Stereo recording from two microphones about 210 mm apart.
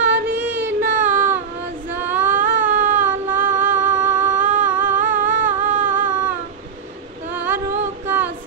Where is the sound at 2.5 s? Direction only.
40° right (ahead or behind).